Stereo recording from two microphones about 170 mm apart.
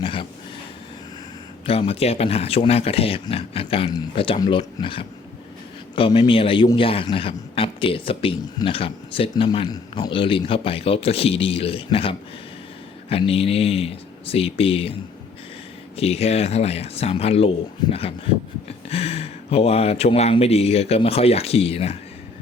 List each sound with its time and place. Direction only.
0.0 s a sound: 30° left (ahead or behind)
1.6 s speech: 35° left (ahead or behind)
16.0 s speech: 35° left (ahead or behind)
18.9 s speech: 35° left (ahead or behind)